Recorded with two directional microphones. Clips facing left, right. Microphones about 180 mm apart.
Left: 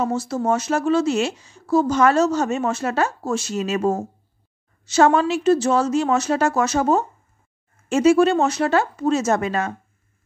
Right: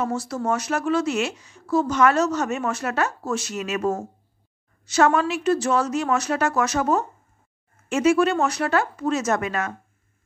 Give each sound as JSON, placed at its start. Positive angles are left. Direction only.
{"t": 0.0, "sound": "speech", "side_deg": 25}